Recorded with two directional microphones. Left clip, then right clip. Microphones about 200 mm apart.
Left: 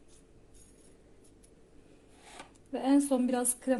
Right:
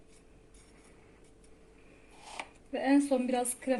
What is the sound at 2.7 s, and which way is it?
A woman's voice, 40° left (ahead or behind).